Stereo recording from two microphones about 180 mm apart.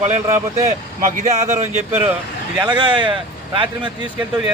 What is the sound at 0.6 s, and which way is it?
Speech, 40° right (ahead or behind).